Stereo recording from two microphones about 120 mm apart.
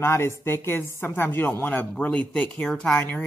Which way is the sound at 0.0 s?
20° left (ahead or behind).